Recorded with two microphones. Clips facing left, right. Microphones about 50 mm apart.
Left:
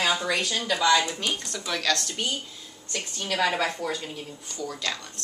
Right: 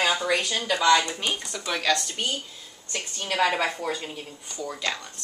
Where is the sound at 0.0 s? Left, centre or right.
Centre.